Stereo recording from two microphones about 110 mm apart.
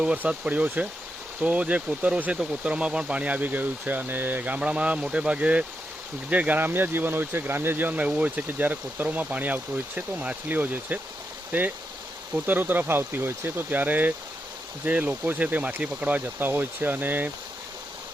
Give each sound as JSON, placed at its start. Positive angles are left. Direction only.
{"t": 0.0, "sound": "speech", "side_deg": -10}
{"t": 12.3, "sound": "speech", "side_deg": -15}